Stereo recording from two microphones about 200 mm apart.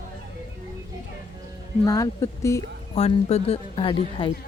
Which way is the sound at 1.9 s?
15° left (ahead or behind).